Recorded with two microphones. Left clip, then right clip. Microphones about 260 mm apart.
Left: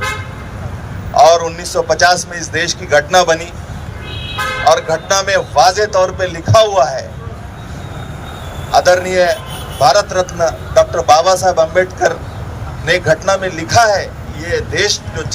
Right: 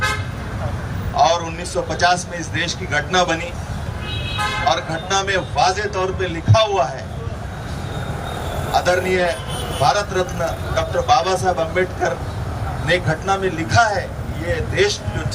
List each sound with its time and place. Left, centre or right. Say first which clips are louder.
1.1 s a man's voice: left 8 dB; left
4.6 s a man's voice: left 12 dB; left
8.7 s a man's voice: left 7 dB; left